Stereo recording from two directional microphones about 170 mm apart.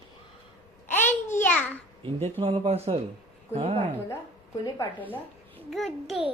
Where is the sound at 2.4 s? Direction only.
35° right (ahead or behind).